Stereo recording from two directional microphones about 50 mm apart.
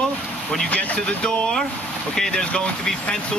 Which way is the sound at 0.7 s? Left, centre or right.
Left.